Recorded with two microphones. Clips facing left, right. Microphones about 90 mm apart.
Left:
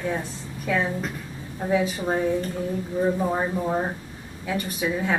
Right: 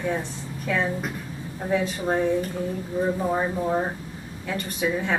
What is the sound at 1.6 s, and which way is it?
A woman's voice, 5° left (ahead or behind).